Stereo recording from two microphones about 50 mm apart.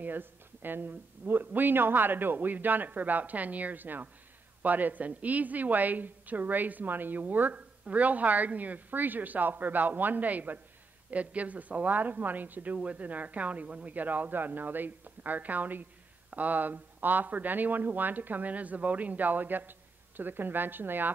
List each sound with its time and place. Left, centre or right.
0.0 s speech: right